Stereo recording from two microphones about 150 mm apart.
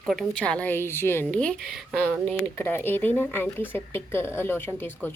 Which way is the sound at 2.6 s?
15° left (ahead or behind).